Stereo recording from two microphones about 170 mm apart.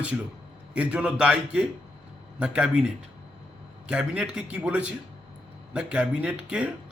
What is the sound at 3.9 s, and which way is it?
A man's voice, 5° right (ahead or behind).